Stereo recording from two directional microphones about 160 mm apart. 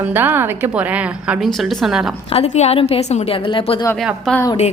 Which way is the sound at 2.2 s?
40° left (ahead or behind).